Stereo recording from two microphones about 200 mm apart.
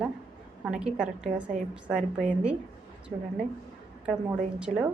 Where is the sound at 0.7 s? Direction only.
5° right (ahead or behind).